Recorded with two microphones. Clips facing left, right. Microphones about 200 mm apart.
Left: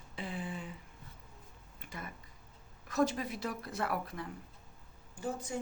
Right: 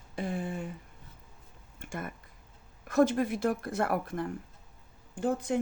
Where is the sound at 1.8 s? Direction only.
50° right (ahead or behind).